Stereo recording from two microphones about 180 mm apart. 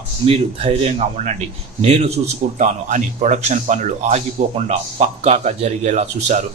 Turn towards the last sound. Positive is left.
turn(degrees=-40)  # may be behind; listen again after turning